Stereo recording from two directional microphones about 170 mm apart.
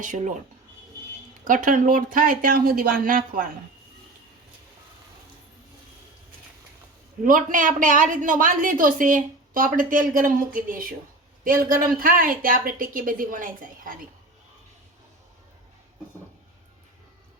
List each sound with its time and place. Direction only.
0.0 s speech: 50° right (ahead or behind)
1.5 s speech: 50° right (ahead or behind)
7.3 s speech: 50° right (ahead or behind)